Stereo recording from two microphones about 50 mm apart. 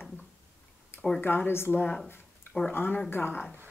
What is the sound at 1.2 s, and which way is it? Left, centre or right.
Speech, left.